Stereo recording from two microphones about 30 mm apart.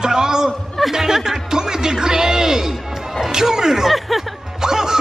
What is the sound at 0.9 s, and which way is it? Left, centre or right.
Speech, centre.